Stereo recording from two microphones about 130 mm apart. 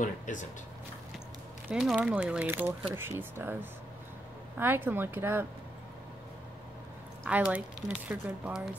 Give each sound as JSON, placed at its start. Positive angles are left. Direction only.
{"t": 0.0, "sound": "speech", "side_deg": 75}
{"t": 1.7, "sound": "speech", "side_deg": 0}
{"t": 4.6, "sound": "speech", "side_deg": -15}
{"t": 7.2, "sound": "speech", "side_deg": -10}